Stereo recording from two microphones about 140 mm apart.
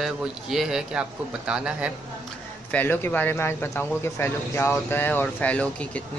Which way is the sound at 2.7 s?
15° left (ahead or behind).